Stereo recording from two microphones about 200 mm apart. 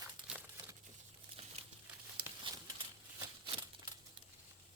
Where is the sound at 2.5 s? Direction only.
25° right (ahead or behind).